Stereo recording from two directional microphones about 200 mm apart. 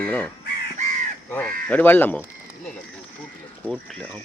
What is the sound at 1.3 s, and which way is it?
Speech, 10° left (ahead or behind).